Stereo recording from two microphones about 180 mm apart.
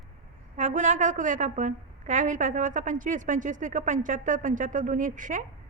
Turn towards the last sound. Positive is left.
turn(degrees=-45)  # may be behind; listen again after turning